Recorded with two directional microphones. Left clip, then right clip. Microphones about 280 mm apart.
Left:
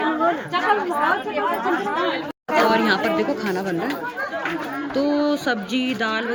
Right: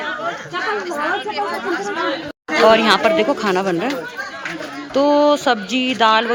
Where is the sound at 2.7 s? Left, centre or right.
Centre.